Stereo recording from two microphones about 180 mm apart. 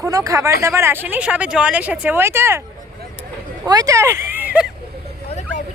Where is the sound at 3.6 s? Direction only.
20° right (ahead or behind).